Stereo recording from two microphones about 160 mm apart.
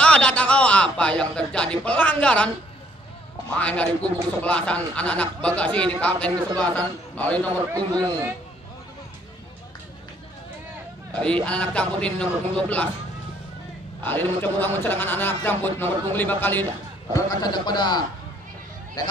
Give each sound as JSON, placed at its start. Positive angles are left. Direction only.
{"t": 0.0, "sound": "a sound", "side_deg": 5}
{"t": 3.5, "sound": "a man's voice", "side_deg": 10}
{"t": 7.7, "sound": "speech", "side_deg": -25}
{"t": 11.1, "sound": "a man's voice", "side_deg": 5}
{"t": 14.0, "sound": "a man's voice", "side_deg": 10}
{"t": 17.1, "sound": "a man's voice", "side_deg": 25}